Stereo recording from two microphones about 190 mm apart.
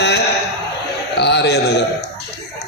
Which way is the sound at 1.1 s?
65° left (ahead or behind).